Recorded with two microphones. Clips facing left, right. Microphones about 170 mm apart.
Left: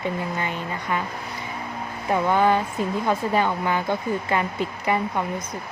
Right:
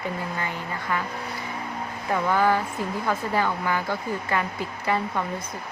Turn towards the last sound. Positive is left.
turn(degrees=15)  # may be behind; listen again after turning